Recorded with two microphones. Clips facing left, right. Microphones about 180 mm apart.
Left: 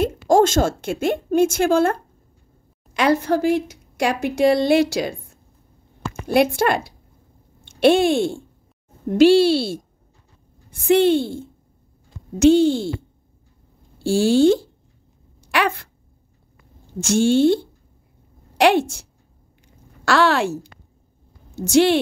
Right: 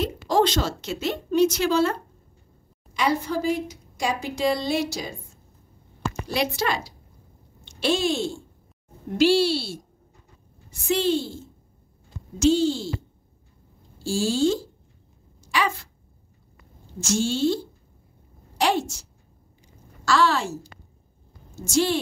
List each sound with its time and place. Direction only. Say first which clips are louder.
0.0 s a woman's voice: left 6 dB; 45° left (ahead or behind)
2.9 s a woman's voice: left 6 dB; 80° left
6.2 s speech: left 9 dB; 55° left (ahead or behind)
10.7 s speech: left 8 dB; 55° left (ahead or behind)
15.4 s a sound: left 4 dB; 60° left (ahead or behind)
17.0 s speech: left 7 dB; 60° left (ahead or behind)
20.1 s speech: left 4 dB; 65° left (ahead or behind)